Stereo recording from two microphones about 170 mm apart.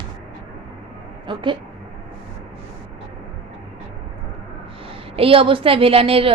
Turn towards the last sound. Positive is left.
turn(degrees=-35)  # may be behind; listen again after turning